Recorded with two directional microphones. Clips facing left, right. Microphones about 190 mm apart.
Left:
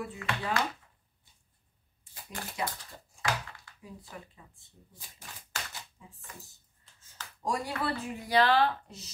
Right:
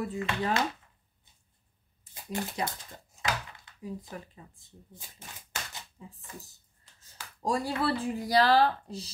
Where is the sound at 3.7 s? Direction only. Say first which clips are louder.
Left 1 dB; 20° right (ahead or behind).